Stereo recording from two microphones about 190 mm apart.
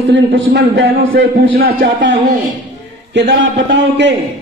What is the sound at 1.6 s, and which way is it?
Speech, 50° right (ahead or behind).